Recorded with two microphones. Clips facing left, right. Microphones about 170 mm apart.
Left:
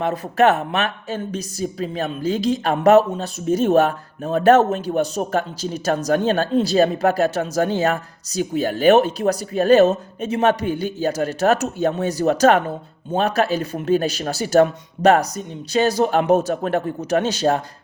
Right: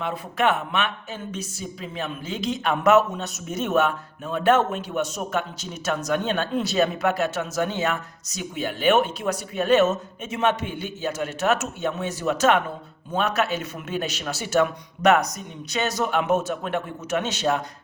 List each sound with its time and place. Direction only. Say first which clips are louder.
0.0 s speech: left 7 dB; 40° left (ahead or behind)